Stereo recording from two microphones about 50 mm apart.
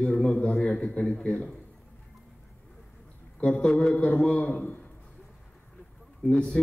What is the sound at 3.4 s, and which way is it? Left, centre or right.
Speech, centre.